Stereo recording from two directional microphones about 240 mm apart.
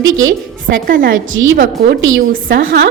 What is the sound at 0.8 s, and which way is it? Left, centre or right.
Speech, right.